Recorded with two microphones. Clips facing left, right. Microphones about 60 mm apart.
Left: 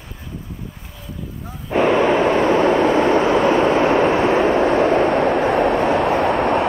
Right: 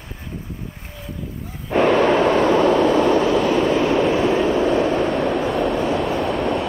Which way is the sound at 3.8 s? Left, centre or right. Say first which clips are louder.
Left 2 dB; left.